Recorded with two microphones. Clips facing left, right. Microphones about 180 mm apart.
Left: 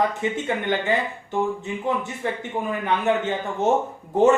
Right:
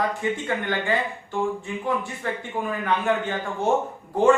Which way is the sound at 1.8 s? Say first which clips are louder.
Left 2 dB; 20° left (ahead or behind).